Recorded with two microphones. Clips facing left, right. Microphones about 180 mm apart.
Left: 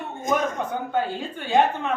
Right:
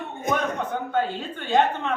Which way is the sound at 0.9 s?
10° left (ahead or behind).